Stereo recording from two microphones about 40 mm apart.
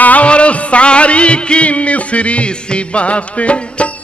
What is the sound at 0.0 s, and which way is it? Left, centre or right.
Music, left.